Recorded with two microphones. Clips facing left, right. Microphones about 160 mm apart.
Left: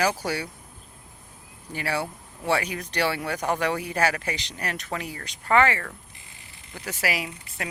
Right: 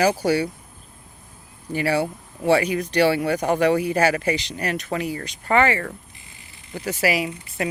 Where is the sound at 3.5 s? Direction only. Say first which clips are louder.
Right 8 dB; 70° right (ahead or behind).